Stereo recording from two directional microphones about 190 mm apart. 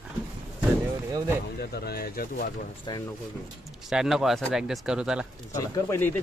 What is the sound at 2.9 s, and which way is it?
Speech, 20° left (ahead or behind).